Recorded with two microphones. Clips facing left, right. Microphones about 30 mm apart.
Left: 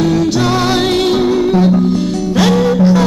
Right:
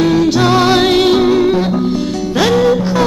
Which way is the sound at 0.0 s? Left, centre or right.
Centre.